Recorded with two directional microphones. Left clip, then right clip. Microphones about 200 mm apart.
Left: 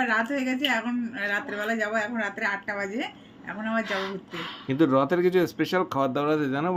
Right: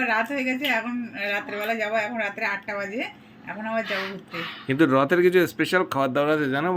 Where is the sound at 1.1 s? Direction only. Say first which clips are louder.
Right 2 dB; 25° left (ahead or behind).